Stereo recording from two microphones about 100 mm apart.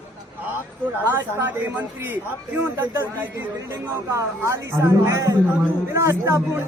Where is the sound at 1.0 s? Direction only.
20° right (ahead or behind).